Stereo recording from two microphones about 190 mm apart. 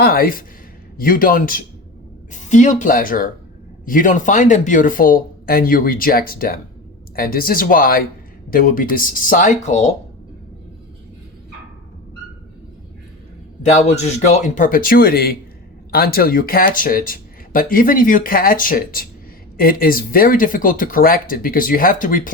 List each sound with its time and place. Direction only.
0.0 s speech: 50° left (ahead or behind)
13.6 s speech: 35° left (ahead or behind)